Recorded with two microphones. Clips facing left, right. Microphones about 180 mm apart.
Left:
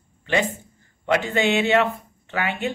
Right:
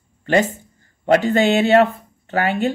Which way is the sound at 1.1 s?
40° right (ahead or behind).